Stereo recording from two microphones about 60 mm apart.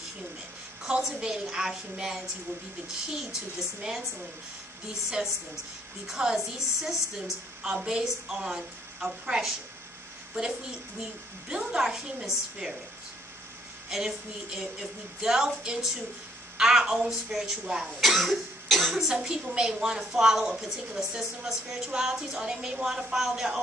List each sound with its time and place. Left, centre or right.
0.8 s speech: centre
3.5 s speech: centre
6.0 s a child's voice: centre
13.8 s speech: centre
19.0 s speech: centre